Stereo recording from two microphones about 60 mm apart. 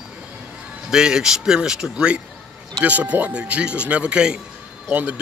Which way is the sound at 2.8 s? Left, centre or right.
Right.